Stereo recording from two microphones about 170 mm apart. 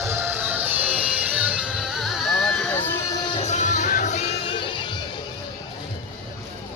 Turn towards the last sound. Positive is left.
turn(degrees=30)  # may be behind; listen again after turning